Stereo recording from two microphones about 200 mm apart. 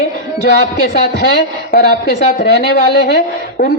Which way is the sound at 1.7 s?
55° left (ahead or behind).